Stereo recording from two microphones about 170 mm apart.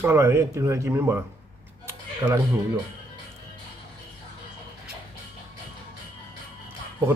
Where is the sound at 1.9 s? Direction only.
15° right (ahead or behind).